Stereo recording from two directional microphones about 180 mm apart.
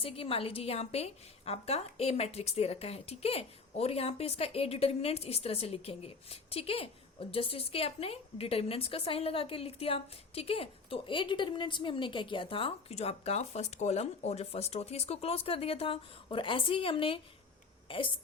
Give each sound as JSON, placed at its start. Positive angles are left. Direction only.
{"t": 0.0, "sound": "a woman's voice", "side_deg": 30}